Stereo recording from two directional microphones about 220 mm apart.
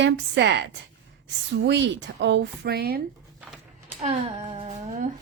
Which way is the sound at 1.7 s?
55° right (ahead or behind).